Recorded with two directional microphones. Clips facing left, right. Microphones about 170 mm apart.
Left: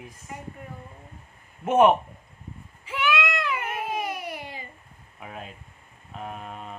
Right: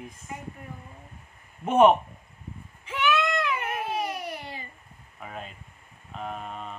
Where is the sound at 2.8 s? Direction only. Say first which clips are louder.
Right 1 dB; 10° left (ahead or behind).